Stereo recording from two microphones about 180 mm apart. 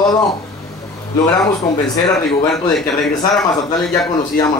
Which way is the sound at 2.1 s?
Centre (ahead or behind).